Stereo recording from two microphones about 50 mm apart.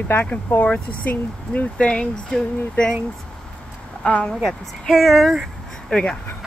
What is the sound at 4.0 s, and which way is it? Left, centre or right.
Speech, centre.